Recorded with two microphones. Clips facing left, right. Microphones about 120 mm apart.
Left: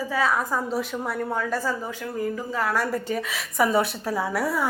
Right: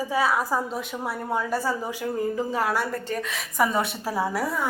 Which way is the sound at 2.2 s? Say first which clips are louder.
Right 1 dB; 20° right (ahead or behind).